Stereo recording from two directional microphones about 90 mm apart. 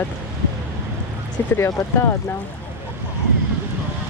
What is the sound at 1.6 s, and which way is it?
Speech, 30° left (ahead or behind).